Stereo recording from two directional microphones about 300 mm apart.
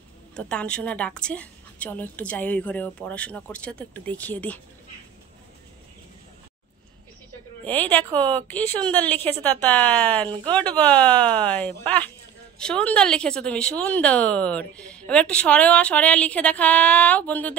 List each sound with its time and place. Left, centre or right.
0.4 s speech: centre
7.6 s speech: centre